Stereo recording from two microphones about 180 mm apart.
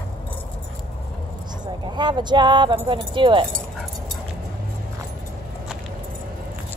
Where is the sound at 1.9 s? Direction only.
25° right (ahead or behind).